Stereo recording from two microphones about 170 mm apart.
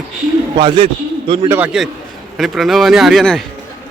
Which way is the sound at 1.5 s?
10° right (ahead or behind).